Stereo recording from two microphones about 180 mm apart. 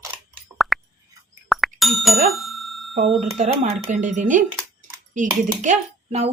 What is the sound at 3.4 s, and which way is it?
Speech, 45° right (ahead or behind).